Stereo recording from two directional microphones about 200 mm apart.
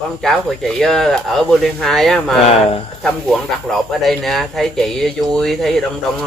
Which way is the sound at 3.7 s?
Centre (ahead or behind).